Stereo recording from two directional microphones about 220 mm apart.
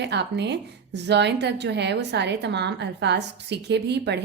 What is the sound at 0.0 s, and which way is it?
A woman's voice, 50° right (ahead or behind).